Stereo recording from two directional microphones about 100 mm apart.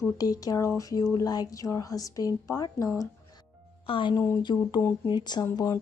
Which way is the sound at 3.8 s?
65° left (ahead or behind).